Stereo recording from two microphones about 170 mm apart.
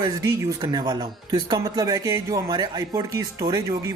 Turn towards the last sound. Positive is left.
turn(degrees=-20)  # may be behind; listen again after turning